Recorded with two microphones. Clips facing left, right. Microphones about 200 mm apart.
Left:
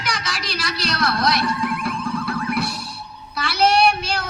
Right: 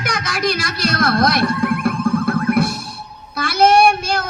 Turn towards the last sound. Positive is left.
turn(degrees=-50)  # may be behind; listen again after turning